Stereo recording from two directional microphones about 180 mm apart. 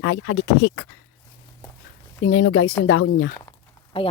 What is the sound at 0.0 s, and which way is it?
Speech, 90° left.